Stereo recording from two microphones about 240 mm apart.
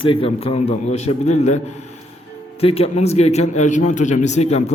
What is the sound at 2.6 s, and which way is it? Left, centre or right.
A man's voice, left.